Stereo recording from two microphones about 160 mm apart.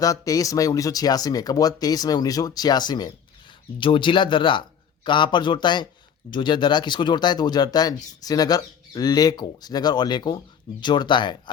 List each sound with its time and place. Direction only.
0.0 s speech: 20° left (ahead or behind)